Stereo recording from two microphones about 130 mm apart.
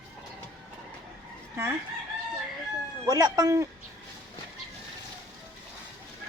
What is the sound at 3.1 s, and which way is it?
Speech, 30° right (ahead or behind).